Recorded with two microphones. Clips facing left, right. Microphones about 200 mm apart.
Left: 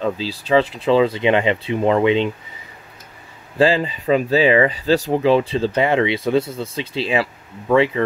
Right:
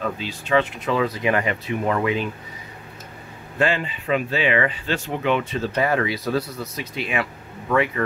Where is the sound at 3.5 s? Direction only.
30° left (ahead or behind).